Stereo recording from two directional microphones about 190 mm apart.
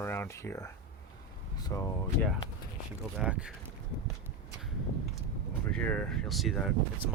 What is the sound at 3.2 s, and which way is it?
Speech, 5° right (ahead or behind).